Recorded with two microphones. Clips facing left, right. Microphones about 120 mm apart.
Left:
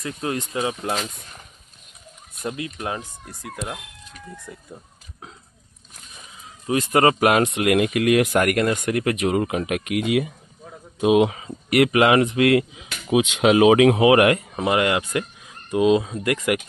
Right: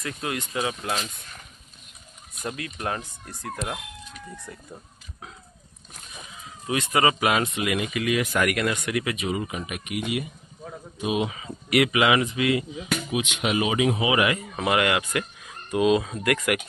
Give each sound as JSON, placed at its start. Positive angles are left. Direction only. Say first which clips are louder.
{"t": 0.0, "sound": "speech", "louder": "left 4 dB", "side_deg": 30}
{"t": 2.4, "sound": "speech", "louder": "left 2 dB", "side_deg": 20}
{"t": 6.7, "sound": "speech", "louder": "left 5 dB", "side_deg": 35}
{"t": 7.0, "sound": "speech", "louder": "left 5 dB", "side_deg": 50}
{"t": 8.4, "sound": "speech", "louder": "left 5 dB", "side_deg": 45}
{"t": 9.1, "sound": "speech", "louder": "left 7 dB", "side_deg": 70}
{"t": 11.3, "sound": "speech", "louder": "left 4 dB", "side_deg": 45}
{"t": 13.1, "sound": "speech", "louder": "left 11 dB", "side_deg": 90}
{"t": 14.5, "sound": "speech", "louder": "left 2 dB", "side_deg": 30}